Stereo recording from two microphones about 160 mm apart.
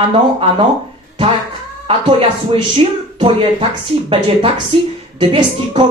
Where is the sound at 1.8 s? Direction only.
35° right (ahead or behind).